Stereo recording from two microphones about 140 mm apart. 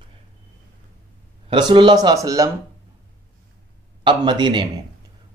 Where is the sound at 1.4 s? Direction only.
35° right (ahead or behind).